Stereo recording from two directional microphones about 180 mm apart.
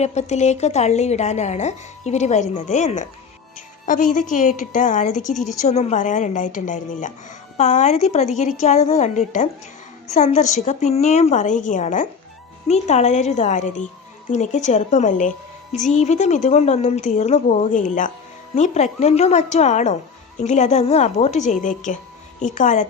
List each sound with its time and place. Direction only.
0.0 s a woman's voice: 40° left (ahead or behind)